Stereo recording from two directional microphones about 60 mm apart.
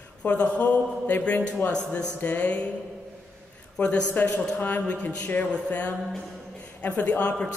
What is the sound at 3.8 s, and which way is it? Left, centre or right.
A woman's voice, left.